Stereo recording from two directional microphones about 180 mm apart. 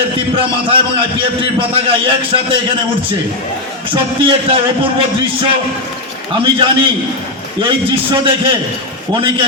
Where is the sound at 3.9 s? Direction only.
30° right (ahead or behind).